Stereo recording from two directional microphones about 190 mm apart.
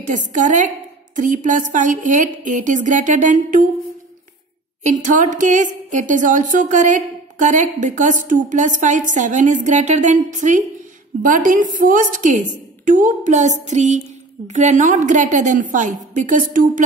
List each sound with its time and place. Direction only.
0.0 s a woman's voice: 40° right (ahead or behind)
4.8 s a woman's voice: 40° right (ahead or behind)